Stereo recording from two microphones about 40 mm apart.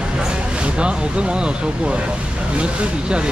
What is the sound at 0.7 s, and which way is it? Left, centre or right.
Speech, right.